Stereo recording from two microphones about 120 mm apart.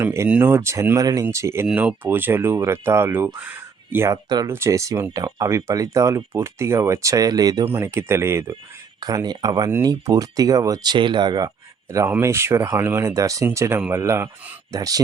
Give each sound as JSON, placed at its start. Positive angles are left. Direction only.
{"t": 0.0, "sound": "speech", "side_deg": -25}
{"t": 1.6, "sound": "speech", "side_deg": -10}
{"t": 7.6, "sound": "speech", "side_deg": -20}
{"t": 9.0, "sound": "speech", "side_deg": -35}
{"t": 10.9, "sound": "speech", "side_deg": -40}